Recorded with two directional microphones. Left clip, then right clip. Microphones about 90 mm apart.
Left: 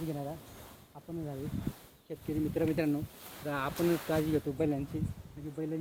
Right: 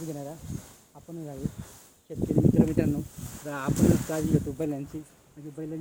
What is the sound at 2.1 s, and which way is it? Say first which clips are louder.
Speech: right 10 dB; centre (ahead or behind).